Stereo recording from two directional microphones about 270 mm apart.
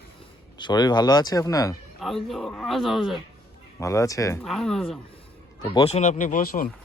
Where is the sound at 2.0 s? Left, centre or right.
Centre.